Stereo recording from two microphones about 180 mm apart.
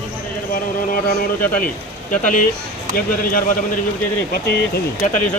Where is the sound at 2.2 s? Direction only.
50° left (ahead or behind).